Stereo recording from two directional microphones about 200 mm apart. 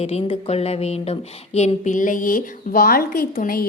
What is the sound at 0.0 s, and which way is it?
A woman's voice, 30° left (ahead or behind).